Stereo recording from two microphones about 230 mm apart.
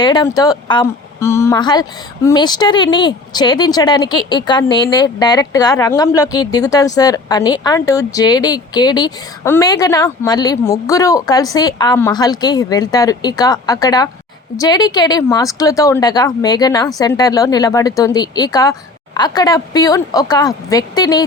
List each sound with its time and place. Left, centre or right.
0.0 s a woman's voice: centre